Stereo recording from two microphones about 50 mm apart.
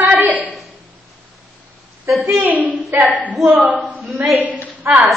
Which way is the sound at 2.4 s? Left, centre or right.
Right.